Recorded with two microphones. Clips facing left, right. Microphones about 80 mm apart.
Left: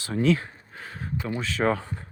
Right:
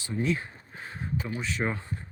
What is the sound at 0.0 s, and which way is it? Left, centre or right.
Speech, left.